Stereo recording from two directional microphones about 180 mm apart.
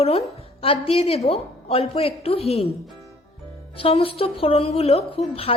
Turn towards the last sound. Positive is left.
turn(degrees=35)  # may be behind; listen again after turning